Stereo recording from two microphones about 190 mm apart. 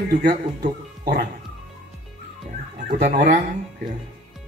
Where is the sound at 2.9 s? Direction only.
60° right (ahead or behind).